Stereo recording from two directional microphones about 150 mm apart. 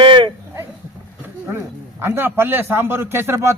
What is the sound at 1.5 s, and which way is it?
A man's voice, 15° right (ahead or behind).